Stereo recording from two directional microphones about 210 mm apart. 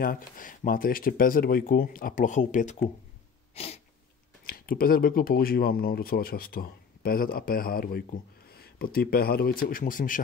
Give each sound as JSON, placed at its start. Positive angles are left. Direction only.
{"t": 0.0, "sound": "speech", "side_deg": 40}
{"t": 3.5, "sound": "sneeze", "side_deg": 30}
{"t": 4.5, "sound": "speech", "side_deg": 45}